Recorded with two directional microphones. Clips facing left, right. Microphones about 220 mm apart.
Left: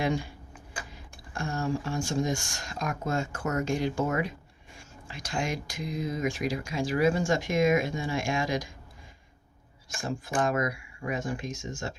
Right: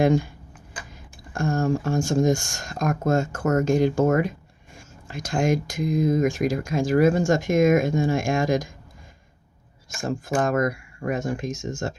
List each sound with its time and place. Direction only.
0.0 s speech: 45° right (ahead or behind)
10.0 s speech: 45° right (ahead or behind)